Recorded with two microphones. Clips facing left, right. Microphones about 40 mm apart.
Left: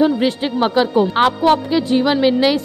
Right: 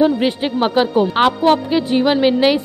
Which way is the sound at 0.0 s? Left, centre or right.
Centre.